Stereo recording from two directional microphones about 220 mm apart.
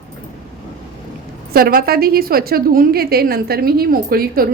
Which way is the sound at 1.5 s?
45° right (ahead or behind).